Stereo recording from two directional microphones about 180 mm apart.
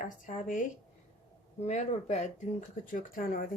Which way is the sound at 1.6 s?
40° left (ahead or behind).